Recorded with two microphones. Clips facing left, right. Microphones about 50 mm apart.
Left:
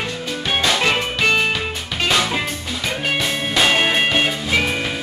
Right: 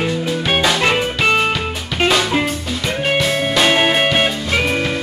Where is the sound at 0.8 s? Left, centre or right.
Centre.